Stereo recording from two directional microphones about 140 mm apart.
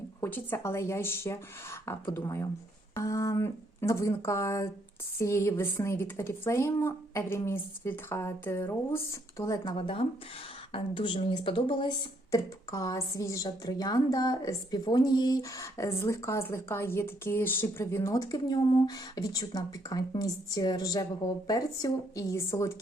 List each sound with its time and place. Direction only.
0.2 s a woman's voice: 15° left (ahead or behind)
9.7 s speech: 40° left (ahead or behind)
12.3 s a woman's voice: 25° left (ahead or behind)